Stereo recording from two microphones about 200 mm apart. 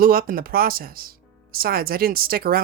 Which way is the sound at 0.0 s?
45° right (ahead or behind).